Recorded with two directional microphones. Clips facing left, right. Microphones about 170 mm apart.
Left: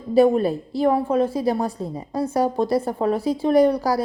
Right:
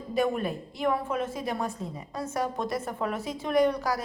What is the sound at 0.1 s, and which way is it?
A woman's voice, 35° left (ahead or behind).